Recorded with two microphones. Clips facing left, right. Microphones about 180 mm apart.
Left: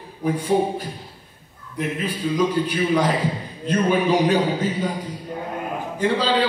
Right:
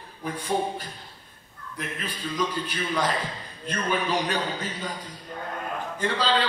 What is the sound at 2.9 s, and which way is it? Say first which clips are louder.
A man's voice: left 7 dB; 10° left (ahead or behind).